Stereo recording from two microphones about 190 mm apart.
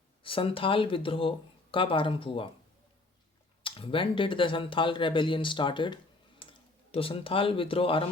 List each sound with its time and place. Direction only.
0.2 s speech: 30° left (ahead or behind)
3.6 s speech: 25° left (ahead or behind)
6.4 s clicking: 30° left (ahead or behind)
6.9 s speech: 30° left (ahead or behind)